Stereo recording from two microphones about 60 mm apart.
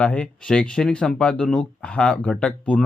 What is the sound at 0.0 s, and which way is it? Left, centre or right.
Speech, left.